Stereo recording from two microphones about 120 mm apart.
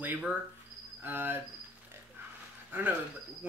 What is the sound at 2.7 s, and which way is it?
Speech, 15° right (ahead or behind).